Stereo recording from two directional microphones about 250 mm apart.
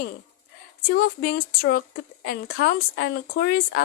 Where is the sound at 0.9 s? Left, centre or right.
Left.